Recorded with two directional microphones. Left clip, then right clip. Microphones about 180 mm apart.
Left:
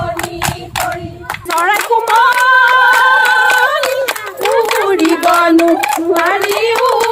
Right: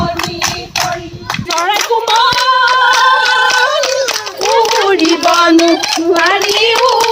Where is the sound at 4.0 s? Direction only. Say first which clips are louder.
Right 1 dB; 30° right (ahead or behind).